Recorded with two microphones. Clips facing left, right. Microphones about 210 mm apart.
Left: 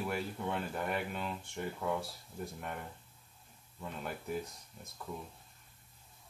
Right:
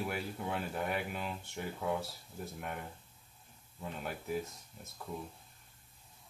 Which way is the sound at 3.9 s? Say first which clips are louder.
Right 1 dB; centre (ahead or behind).